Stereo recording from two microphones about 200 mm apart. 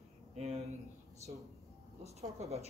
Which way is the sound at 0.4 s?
30° right (ahead or behind).